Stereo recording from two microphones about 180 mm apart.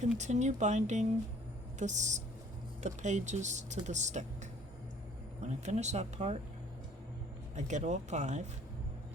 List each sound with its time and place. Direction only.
0.2 s speech: 40° right (ahead or behind)
5.4 s speech: 40° right (ahead or behind)
7.5 s speech: 40° right (ahead or behind)